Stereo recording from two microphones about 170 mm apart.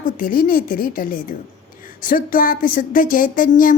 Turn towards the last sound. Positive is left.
turn(degrees=55)  # may be behind; listen again after turning